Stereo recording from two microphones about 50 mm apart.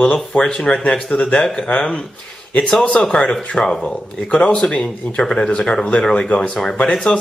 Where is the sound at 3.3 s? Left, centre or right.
Left.